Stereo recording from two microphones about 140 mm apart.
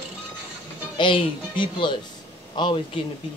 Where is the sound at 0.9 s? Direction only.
35° left (ahead or behind).